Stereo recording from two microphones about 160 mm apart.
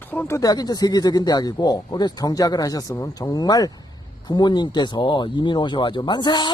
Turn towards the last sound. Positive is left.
turn(degrees=30)  # may be behind; listen again after turning